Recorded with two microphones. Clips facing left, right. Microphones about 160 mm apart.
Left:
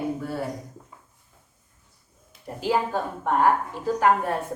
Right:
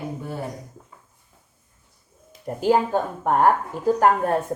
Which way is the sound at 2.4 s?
45° right (ahead or behind).